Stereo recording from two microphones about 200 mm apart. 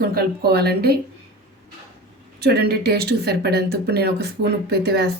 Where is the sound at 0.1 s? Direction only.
50° right (ahead or behind).